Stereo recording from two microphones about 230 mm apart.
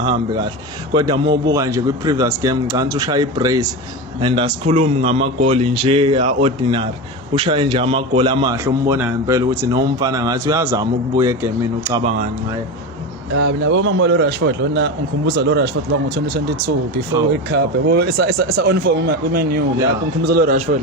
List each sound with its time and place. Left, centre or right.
0.0 s a man's voice: right
13.3 s speech: right